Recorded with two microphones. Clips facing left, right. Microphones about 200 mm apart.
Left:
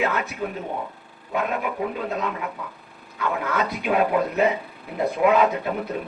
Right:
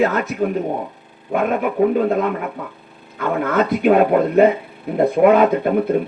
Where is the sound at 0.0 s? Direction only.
45° right (ahead or behind).